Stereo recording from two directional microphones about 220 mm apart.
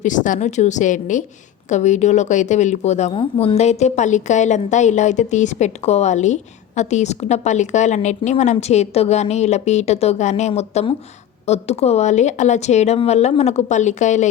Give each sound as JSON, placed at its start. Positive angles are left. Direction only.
{"t": 0.0, "sound": "speech", "side_deg": 35}